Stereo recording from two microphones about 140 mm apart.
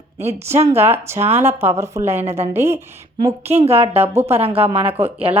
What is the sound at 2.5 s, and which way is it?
Speech, 20° right (ahead or behind).